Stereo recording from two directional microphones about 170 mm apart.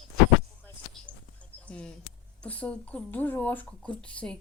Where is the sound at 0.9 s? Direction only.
5° left (ahead or behind).